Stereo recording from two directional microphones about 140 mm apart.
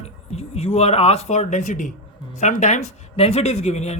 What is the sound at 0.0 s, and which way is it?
Speech, 50° left (ahead or behind).